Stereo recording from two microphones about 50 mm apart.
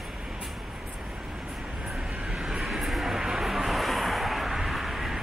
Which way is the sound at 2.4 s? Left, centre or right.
Centre.